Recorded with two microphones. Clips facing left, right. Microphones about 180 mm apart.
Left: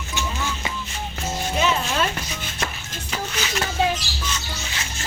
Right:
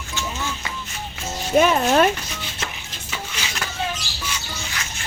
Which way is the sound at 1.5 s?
45° right (ahead or behind).